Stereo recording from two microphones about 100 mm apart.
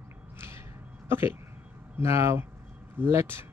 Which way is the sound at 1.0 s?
25° right (ahead or behind).